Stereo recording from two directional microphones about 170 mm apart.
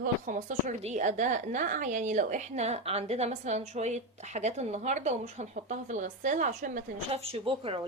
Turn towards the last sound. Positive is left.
turn(degrees=-35)  # may be behind; listen again after turning